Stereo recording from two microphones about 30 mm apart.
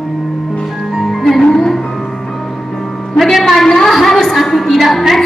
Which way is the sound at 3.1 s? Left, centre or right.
Centre.